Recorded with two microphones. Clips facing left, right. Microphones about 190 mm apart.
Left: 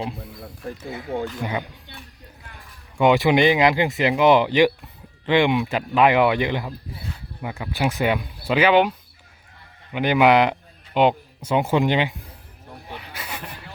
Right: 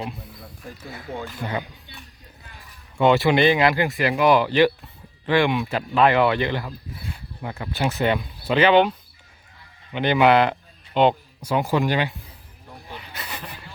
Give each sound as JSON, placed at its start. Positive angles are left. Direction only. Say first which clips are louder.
{"t": 1.4, "sound": "speech", "louder": "left 2 dB", "side_deg": 15}
{"t": 3.0, "sound": "speech", "louder": "left 1 dB", "side_deg": 15}
{"t": 13.1, "sound": "a sound", "louder": "even", "side_deg": 10}